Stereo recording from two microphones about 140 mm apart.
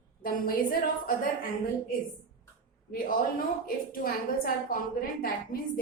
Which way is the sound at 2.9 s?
90° left.